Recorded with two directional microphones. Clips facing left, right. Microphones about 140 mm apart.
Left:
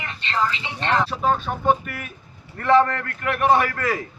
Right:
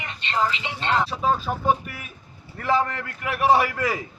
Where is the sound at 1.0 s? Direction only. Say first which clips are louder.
Left 1 dB; centre (ahead or behind).